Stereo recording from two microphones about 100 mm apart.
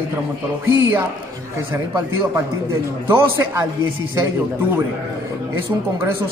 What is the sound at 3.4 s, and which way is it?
Speech, 25° right (ahead or behind).